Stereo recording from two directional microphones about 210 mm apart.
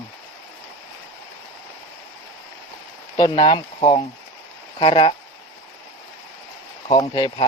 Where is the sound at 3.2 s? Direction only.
25° left (ahead or behind).